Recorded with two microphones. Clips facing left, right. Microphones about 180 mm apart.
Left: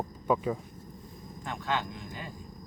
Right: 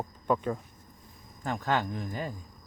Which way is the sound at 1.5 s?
45° right (ahead or behind).